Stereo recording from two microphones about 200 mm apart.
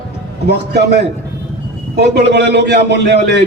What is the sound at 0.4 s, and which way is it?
A man's voice, 55° right (ahead or behind).